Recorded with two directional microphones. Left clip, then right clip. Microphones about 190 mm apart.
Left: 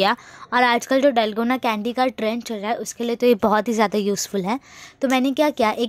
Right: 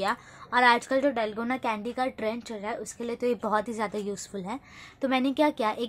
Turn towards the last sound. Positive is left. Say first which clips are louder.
# left 7 dB
turn(degrees=35)  # may be behind; listen again after turning